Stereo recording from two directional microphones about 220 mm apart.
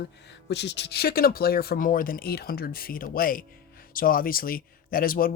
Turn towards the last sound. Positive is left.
turn(degrees=40)  # may be behind; listen again after turning